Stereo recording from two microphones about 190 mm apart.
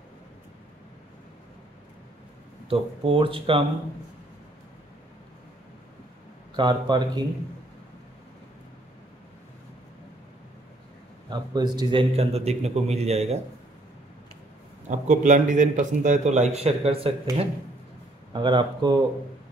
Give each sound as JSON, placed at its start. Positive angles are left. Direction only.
{"t": 2.7, "sound": "speech", "side_deg": -30}
{"t": 6.5, "sound": "speech", "side_deg": -25}
{"t": 11.2, "sound": "a man's voice", "side_deg": -20}
{"t": 14.9, "sound": "a man's voice", "side_deg": -40}